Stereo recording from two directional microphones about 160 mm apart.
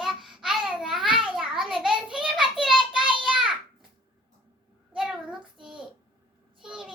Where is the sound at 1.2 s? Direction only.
5° right (ahead or behind).